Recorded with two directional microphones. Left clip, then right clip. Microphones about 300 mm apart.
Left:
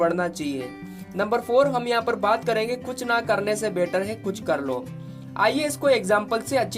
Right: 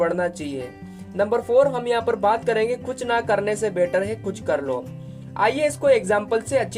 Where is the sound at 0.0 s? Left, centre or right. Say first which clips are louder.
Right 1 dB; centre.